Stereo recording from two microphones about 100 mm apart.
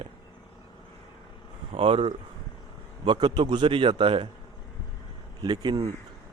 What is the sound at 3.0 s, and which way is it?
A man's voice, 50° right (ahead or behind).